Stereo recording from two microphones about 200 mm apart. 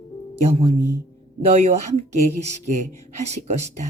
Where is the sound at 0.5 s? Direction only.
30° right (ahead or behind).